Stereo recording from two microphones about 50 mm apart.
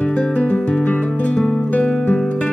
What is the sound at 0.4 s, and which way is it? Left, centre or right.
Music, left.